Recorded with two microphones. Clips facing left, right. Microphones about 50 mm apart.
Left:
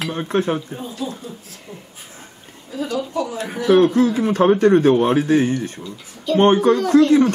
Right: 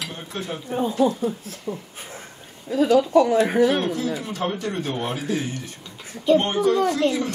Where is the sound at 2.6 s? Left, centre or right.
Right.